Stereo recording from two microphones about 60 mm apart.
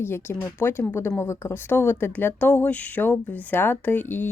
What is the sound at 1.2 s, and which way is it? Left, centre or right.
Speech, left.